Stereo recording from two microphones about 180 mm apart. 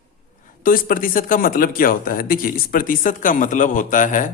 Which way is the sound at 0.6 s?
50° left (ahead or behind).